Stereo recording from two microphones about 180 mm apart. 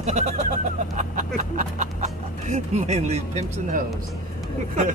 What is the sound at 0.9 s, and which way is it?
Speech, 45° right (ahead or behind).